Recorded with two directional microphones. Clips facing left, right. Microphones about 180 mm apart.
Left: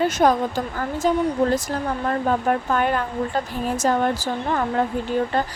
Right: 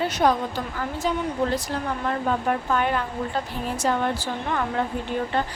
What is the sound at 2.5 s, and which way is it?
Speech, 40° left (ahead or behind).